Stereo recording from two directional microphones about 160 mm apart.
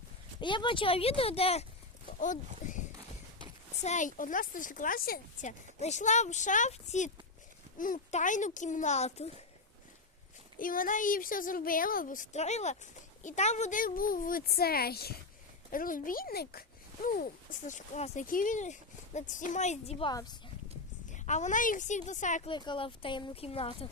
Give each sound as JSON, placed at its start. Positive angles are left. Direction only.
{"t": 0.3, "sound": "speech", "side_deg": 30}
{"t": 2.1, "sound": "speech", "side_deg": 50}
{"t": 3.8, "sound": "a woman's voice", "side_deg": 50}
{"t": 10.6, "sound": "a woman's voice", "side_deg": 60}
{"t": 15.7, "sound": "a child's voice", "side_deg": 60}
{"t": 17.7, "sound": "a woman's voice", "side_deg": 50}
{"t": 20.1, "sound": "speech", "side_deg": 25}
{"t": 21.1, "sound": "a woman's voice", "side_deg": 50}
{"t": 22.4, "sound": "speech", "side_deg": 30}